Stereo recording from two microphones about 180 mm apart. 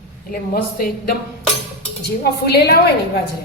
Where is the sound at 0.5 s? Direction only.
55° left (ahead or behind).